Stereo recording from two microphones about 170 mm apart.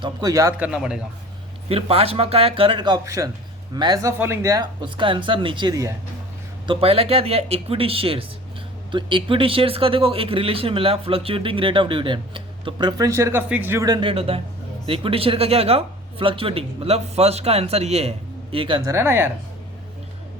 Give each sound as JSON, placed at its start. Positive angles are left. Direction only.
{"t": 0.0, "sound": "speech", "side_deg": -20}
{"t": 0.5, "sound": "speech", "side_deg": -5}
{"t": 1.7, "sound": "speech", "side_deg": -35}
{"t": 6.7, "sound": "speech", "side_deg": -35}
{"t": 18.9, "sound": "speech", "side_deg": -15}